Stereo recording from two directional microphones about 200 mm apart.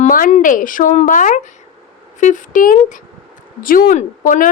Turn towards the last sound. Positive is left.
turn(degrees=40)  # may be behind; listen again after turning